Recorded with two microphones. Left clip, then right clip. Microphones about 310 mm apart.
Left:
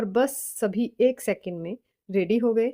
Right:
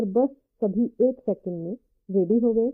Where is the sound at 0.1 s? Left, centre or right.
Left.